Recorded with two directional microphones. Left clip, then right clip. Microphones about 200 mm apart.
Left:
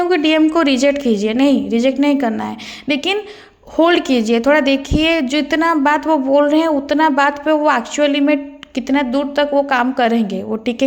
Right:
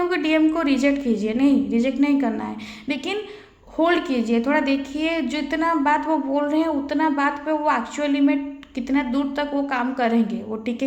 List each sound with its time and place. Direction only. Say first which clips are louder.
0.1 s a woman's voice: left 6 dB; 40° left (ahead or behind)